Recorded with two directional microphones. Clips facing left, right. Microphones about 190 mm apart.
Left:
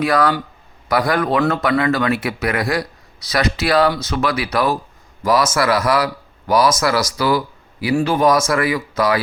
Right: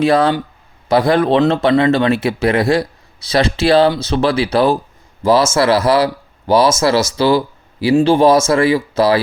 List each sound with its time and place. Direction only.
0.0 s speech: 25° right (ahead or behind)